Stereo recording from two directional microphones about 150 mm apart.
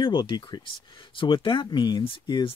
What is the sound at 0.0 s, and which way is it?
Speech, 30° left (ahead or behind).